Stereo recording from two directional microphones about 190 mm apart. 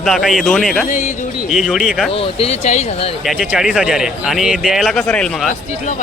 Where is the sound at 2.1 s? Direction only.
30° left (ahead or behind).